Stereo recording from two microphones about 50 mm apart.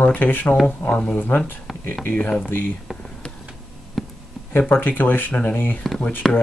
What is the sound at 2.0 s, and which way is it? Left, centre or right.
Speech, left.